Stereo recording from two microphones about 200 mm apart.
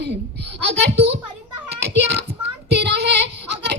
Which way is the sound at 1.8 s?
60° right (ahead or behind).